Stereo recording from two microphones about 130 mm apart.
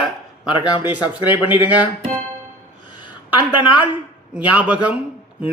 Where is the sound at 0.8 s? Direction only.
15° right (ahead or behind).